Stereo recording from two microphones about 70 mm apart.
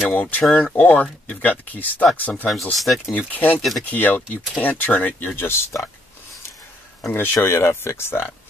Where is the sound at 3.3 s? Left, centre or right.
Left.